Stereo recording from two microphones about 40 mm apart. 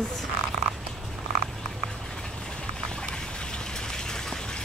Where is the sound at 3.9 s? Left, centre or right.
Centre.